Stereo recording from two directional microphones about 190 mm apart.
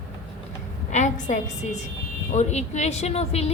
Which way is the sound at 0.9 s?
40° left (ahead or behind).